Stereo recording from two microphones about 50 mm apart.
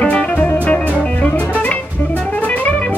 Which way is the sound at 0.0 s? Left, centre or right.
Left.